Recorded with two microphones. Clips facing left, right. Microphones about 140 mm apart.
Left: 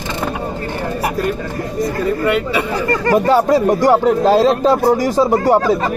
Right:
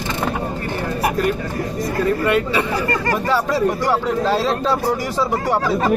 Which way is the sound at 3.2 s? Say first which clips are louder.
Left 5 dB; 40° left (ahead or behind).